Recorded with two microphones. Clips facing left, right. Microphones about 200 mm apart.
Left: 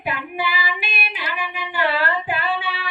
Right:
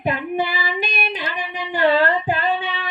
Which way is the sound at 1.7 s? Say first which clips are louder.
Right 6 dB; 45° right (ahead or behind).